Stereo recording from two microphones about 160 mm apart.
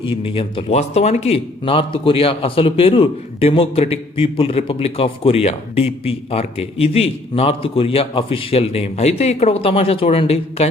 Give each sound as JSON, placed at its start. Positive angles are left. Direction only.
{"t": 0.0, "sound": "a man's voice", "side_deg": 35}